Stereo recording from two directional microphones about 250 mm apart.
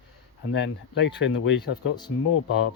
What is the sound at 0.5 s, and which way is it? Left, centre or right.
Speech, left.